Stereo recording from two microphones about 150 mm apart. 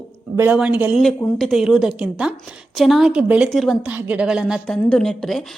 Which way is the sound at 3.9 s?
10° right (ahead or behind).